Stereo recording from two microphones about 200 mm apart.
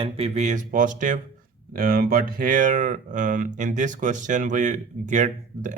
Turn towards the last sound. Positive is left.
turn(degrees=-40)  # may be behind; listen again after turning